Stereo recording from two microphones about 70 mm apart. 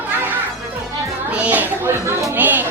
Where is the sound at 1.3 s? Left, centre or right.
Right.